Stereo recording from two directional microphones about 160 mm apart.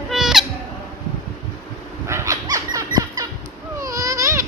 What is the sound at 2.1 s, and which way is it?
Dog, 20° right (ahead or behind).